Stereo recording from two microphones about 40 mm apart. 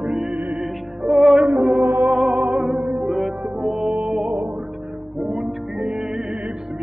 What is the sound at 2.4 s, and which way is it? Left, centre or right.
Music, centre.